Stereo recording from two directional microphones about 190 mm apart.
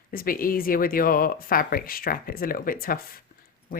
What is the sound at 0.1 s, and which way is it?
Speech, 50° left (ahead or behind).